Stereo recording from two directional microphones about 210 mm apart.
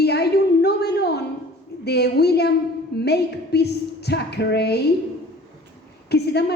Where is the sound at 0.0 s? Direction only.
50° left (ahead or behind).